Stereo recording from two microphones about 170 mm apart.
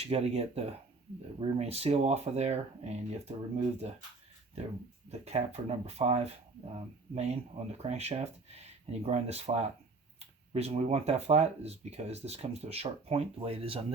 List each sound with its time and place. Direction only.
0.0 s speech: 40° right (ahead or behind)
5.0 s speech: 40° right (ahead or behind)